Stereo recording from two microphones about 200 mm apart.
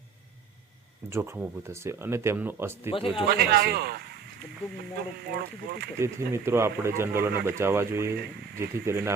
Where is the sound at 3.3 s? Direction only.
50° right (ahead or behind).